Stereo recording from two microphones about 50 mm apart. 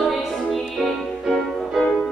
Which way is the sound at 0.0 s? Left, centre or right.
Centre.